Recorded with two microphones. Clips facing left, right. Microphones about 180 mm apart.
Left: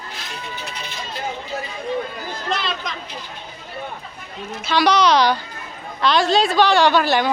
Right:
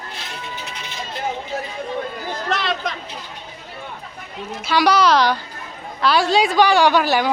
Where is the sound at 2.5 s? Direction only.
65° right (ahead or behind).